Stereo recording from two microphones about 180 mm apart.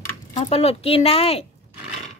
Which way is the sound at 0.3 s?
35° left (ahead or behind).